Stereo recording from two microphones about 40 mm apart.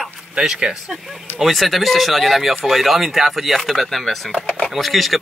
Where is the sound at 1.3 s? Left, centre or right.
Centre.